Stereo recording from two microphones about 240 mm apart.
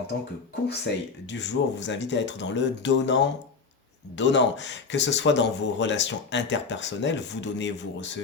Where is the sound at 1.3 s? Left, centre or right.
Left.